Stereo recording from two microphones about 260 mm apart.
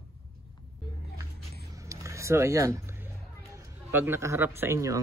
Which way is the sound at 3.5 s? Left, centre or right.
Centre.